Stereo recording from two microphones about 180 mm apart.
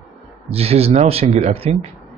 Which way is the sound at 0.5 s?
35° right (ahead or behind).